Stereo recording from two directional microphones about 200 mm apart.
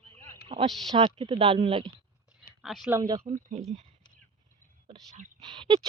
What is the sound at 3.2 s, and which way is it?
Speech, 40° right (ahead or behind).